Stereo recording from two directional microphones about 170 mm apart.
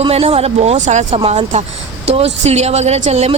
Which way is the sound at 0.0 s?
35° right (ahead or behind).